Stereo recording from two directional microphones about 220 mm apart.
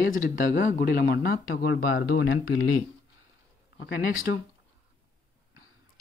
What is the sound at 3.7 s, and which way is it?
Speech, 50° left (ahead or behind).